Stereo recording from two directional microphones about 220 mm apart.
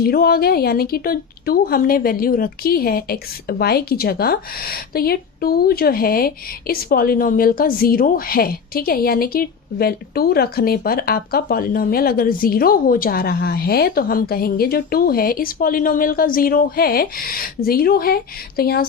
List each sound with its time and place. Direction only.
0.0 s a woman's voice: 45° left (ahead or behind)